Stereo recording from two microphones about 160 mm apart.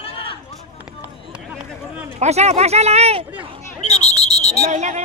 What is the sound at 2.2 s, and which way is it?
Speech, 45° right (ahead or behind).